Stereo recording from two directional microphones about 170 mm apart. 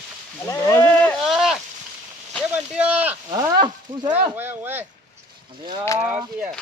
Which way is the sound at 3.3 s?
25° right (ahead or behind).